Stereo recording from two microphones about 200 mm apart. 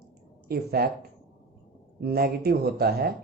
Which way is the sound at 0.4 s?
50° right (ahead or behind).